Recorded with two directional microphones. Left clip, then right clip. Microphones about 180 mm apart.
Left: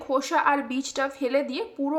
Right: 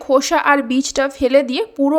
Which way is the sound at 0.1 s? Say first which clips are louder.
Right 9 dB; 35° right (ahead or behind).